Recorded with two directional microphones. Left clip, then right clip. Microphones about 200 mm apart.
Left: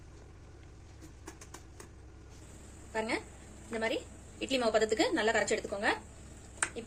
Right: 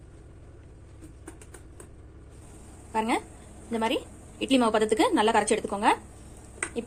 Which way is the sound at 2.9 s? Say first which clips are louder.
Right 8 dB; 30° right (ahead or behind).